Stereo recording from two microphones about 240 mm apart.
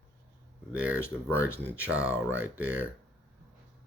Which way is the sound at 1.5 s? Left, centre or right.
Centre.